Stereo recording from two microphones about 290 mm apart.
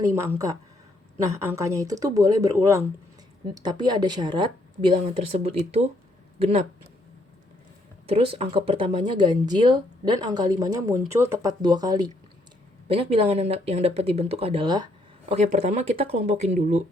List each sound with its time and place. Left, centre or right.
0.2 s speech: centre
8.0 s speech: centre